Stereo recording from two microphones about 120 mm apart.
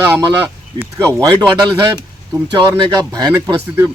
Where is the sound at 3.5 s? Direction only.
20° right (ahead or behind).